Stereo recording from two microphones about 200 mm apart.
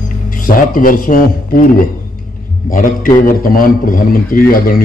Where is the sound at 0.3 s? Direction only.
45° left (ahead or behind).